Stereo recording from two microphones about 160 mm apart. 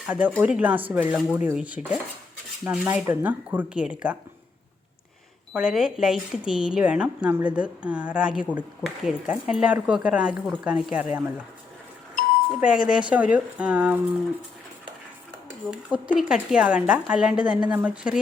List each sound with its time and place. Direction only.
0.1 s speech: 10° right (ahead or behind)
5.5 s speech: 5° right (ahead or behind)
12.5 s speech: 5° right (ahead or behind)
15.7 s speech: 5° right (ahead or behind)